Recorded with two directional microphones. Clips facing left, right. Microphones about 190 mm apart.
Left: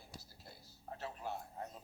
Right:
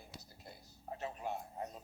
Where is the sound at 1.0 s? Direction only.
20° right (ahead or behind).